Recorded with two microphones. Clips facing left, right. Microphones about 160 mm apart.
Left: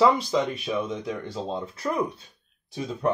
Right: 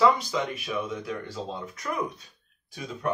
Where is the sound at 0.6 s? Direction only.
25° left (ahead or behind).